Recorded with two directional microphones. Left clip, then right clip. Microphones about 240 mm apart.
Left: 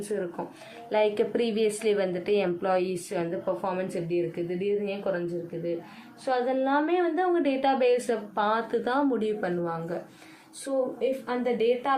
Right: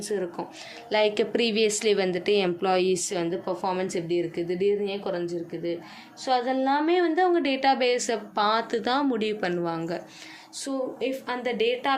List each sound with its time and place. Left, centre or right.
0.9 s a woman's voice: right
6.2 s a woman's voice: right
11.0 s a woman's voice: right